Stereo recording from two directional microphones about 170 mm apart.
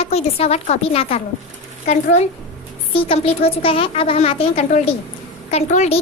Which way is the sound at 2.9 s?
30° left (ahead or behind).